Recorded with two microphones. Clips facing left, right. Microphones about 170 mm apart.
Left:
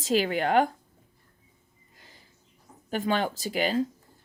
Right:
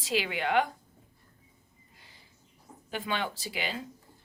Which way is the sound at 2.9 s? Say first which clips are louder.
Left 6 dB; 45° left (ahead or behind).